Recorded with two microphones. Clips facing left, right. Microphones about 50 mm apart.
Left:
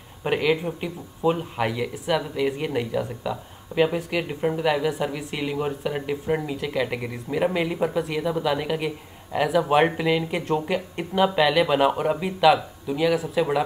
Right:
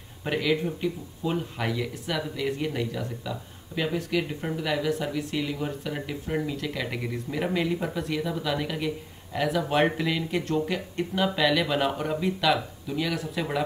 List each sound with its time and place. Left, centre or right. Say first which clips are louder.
0.2 s a woman's voice: left 3 dB; left